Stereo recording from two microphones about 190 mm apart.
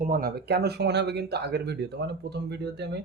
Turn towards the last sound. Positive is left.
turn(degrees=-60)  # may be behind; listen again after turning